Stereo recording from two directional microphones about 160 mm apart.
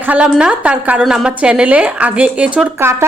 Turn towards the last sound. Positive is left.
turn(degrees=-15)  # may be behind; listen again after turning